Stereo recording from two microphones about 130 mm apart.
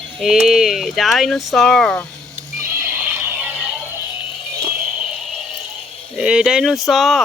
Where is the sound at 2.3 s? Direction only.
20° right (ahead or behind).